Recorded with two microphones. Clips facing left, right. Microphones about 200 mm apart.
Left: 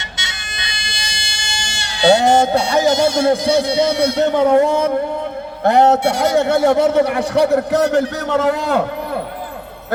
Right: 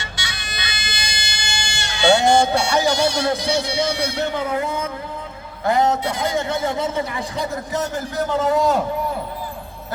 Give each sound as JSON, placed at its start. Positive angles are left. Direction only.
{"t": 0.9, "sound": "speech", "side_deg": 30}
{"t": 4.6, "sound": "a man's voice", "side_deg": 80}